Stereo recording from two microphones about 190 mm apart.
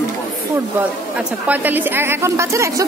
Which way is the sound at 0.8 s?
10° right (ahead or behind).